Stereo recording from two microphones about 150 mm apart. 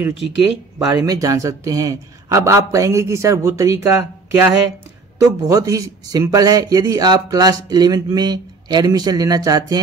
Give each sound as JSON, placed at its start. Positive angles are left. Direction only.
{"t": 0.7, "sound": "a man's voice", "side_deg": -25}